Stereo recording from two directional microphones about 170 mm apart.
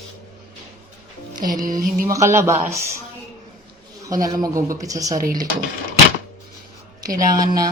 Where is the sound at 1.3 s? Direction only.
50° right (ahead or behind).